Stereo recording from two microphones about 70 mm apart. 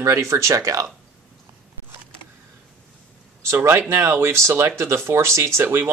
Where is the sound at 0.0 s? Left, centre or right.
Right.